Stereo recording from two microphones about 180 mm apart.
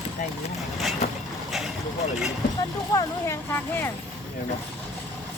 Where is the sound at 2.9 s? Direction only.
15° left (ahead or behind).